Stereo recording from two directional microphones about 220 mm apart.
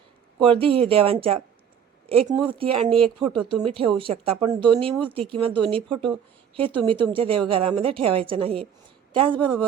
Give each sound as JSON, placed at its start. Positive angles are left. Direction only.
{"t": 0.3, "sound": "speech", "side_deg": -25}